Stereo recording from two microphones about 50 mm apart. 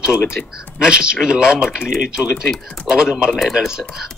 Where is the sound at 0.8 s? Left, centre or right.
Centre.